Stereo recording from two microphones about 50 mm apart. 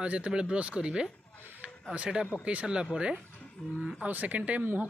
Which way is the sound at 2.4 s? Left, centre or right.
Right.